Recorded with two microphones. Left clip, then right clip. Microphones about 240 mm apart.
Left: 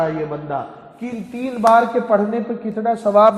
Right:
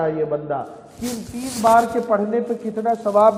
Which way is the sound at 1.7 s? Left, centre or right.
Left.